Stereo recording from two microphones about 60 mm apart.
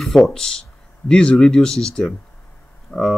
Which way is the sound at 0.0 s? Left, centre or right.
Centre.